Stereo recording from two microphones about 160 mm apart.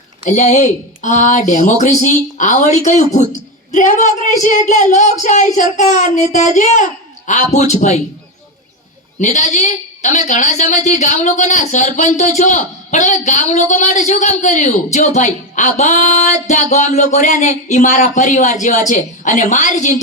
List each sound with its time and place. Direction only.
0.3 s a man's voice: 50° left (ahead or behind)
9.2 s a man's voice: 50° left (ahead or behind)